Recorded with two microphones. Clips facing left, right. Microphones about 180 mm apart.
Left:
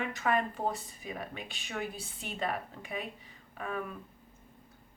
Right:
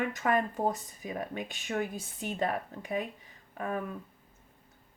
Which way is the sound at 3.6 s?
40° right (ahead or behind).